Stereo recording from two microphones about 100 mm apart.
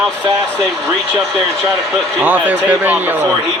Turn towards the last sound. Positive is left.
turn(degrees=-15)  # may be behind; listen again after turning